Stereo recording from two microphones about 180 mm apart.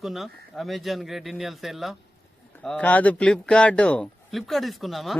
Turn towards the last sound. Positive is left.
turn(degrees=0)  # may be behind; listen again after turning